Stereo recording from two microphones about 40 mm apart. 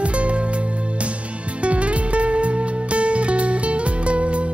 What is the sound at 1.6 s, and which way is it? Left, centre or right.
Music, right.